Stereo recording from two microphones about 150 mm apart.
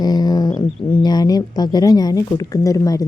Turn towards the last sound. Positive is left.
turn(degrees=20)  # may be behind; listen again after turning